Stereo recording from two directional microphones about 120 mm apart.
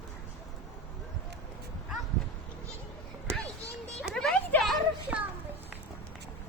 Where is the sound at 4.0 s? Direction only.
5° left (ahead or behind).